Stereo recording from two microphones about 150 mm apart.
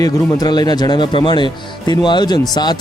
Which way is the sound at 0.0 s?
25° left (ahead or behind).